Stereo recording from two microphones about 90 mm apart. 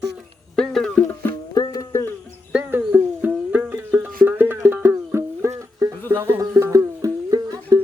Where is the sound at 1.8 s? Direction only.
35° left (ahead or behind).